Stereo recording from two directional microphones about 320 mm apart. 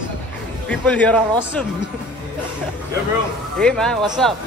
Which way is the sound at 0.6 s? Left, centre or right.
Centre.